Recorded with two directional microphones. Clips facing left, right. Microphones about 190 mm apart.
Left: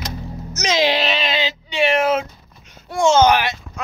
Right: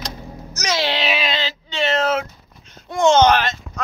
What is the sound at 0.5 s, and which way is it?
Music, 20° left (ahead or behind).